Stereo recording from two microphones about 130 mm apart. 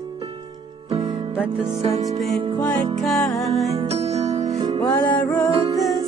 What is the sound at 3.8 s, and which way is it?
Music, 50° right (ahead or behind).